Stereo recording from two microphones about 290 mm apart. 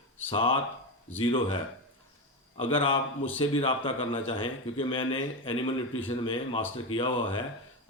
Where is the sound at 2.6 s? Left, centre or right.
Centre.